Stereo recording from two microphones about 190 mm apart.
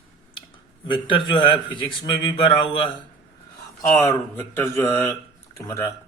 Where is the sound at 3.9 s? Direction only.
15° left (ahead or behind).